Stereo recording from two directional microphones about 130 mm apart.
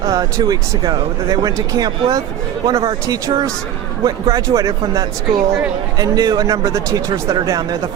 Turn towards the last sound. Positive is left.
turn(degrees=-30)  # may be behind; listen again after turning